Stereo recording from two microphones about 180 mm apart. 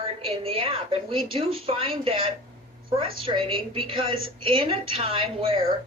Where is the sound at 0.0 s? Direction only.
30° right (ahead or behind).